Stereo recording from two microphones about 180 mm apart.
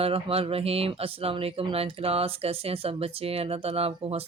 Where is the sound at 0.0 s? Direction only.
30° right (ahead or behind).